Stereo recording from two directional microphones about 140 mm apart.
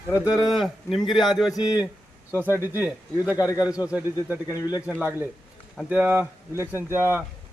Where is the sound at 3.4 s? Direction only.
25° left (ahead or behind).